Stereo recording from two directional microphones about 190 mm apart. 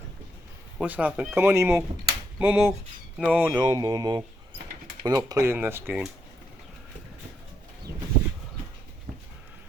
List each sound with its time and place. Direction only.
0.8 s speech: 5° right (ahead or behind)